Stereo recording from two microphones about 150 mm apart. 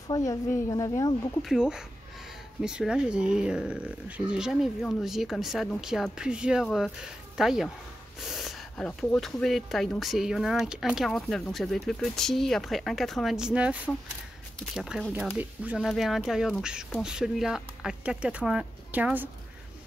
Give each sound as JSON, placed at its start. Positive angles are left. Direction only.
{"t": 0.1, "sound": "a woman's voice", "side_deg": 20}
{"t": 1.4, "sound": "speech", "side_deg": -5}